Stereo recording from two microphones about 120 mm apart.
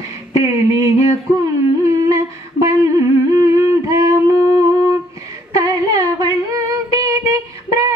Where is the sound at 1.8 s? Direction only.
25° right (ahead or behind).